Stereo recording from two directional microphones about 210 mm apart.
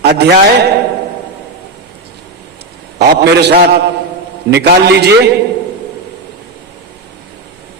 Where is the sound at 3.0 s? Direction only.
50° right (ahead or behind).